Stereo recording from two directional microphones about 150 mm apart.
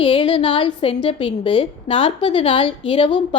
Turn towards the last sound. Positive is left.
turn(degrees=35)  # may be behind; listen again after turning